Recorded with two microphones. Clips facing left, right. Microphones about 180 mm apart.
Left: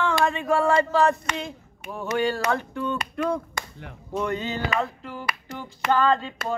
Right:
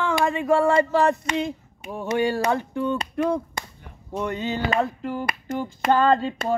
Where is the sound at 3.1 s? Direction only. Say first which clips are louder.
Right 3 dB; 25° right (ahead or behind).